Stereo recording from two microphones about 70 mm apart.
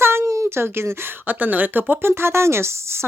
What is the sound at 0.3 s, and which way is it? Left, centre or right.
Speech, right.